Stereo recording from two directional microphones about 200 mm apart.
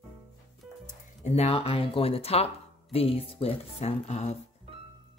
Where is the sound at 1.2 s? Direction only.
30° left (ahead or behind).